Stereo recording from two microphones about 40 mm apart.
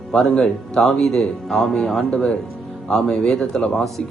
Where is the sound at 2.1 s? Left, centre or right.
Left.